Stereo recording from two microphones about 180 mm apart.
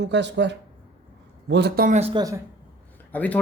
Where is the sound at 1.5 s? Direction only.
65° right (ahead or behind).